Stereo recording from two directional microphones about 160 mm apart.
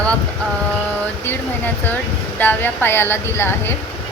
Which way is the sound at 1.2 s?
10° left (ahead or behind).